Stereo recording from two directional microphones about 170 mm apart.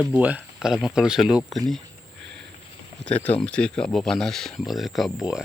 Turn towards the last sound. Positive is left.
turn(degrees=-5)  # may be behind; listen again after turning